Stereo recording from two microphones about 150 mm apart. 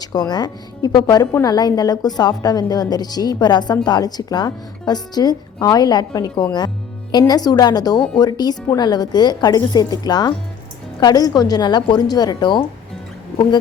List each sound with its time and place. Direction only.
0.0 s a woman's voice: 25° left (ahead or behind)